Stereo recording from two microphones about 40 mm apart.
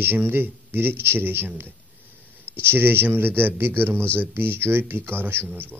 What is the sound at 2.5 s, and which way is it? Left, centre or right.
Speech, right.